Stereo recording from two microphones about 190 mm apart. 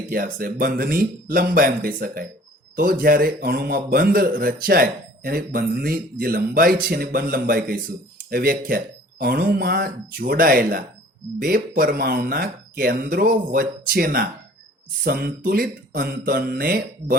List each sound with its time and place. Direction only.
0.1 s speech: 50° right (ahead or behind)